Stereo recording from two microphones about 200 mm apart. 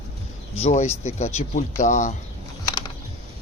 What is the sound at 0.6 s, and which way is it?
Speech, 35° left (ahead or behind).